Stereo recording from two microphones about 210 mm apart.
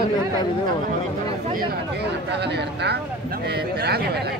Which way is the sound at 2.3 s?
50° right (ahead or behind).